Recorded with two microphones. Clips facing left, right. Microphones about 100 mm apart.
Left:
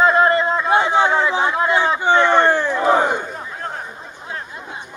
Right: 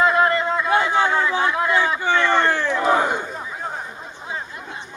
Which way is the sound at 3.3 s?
Centre (ahead or behind).